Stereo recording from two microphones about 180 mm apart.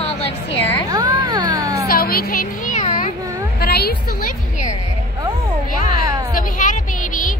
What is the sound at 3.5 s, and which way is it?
Music, 60° left (ahead or behind).